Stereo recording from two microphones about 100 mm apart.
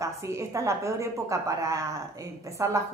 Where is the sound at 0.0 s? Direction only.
30° right (ahead or behind).